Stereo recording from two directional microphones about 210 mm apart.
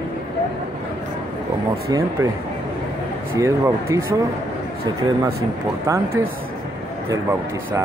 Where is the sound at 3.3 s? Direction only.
15° right (ahead or behind).